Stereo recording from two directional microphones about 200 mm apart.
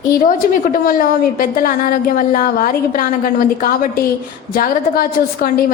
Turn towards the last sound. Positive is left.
turn(degrees=45)  # may be behind; listen again after turning